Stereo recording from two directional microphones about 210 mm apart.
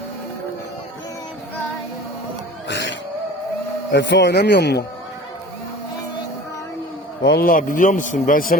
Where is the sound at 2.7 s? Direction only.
55° left (ahead or behind).